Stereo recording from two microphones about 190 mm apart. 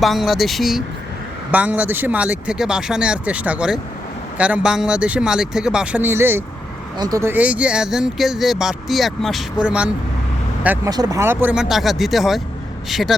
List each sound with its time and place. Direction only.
0.0 s speech: centre (ahead or behind)
10.8 s speech: 20° right (ahead or behind); by 13.1 s centre (ahead or behind)